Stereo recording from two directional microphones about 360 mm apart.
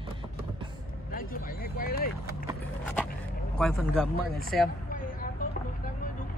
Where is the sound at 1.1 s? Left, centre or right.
Left.